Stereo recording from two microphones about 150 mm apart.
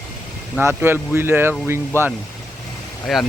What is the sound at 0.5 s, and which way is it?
Speech, 15° right (ahead or behind).